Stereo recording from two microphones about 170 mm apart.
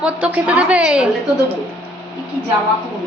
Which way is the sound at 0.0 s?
5° right (ahead or behind).